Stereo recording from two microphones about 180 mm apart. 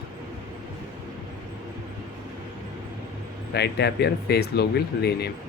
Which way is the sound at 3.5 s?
65° left (ahead or behind).